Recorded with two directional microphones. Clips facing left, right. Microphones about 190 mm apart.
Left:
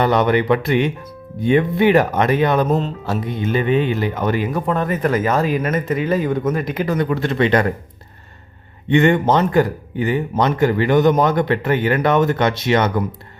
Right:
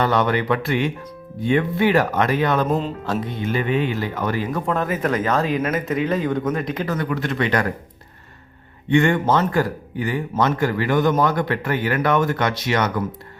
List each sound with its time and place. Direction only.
0.0 s speech: 20° left (ahead or behind)
2.6 s speech: centre (ahead or behind)
3.1 s speech: 15° left (ahead or behind)
4.6 s speech: centre (ahead or behind)
7.1 s speech: 30° left (ahead or behind)
8.9 s speech: 20° left (ahead or behind)